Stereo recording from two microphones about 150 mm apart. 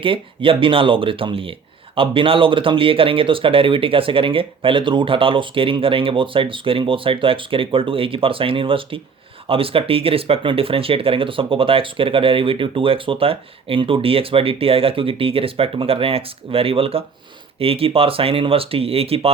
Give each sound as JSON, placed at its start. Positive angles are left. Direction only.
{"t": 0.0, "sound": "speech", "side_deg": -35}